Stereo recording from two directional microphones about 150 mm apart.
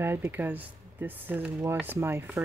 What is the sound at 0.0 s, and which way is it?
Speech, 15° right (ahead or behind).